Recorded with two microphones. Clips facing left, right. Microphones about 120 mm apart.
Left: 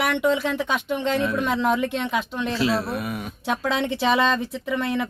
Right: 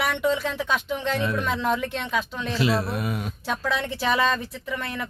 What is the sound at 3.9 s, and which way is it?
Speech, 20° left (ahead or behind).